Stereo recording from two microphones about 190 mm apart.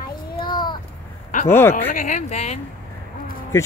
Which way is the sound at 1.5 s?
10° left (ahead or behind).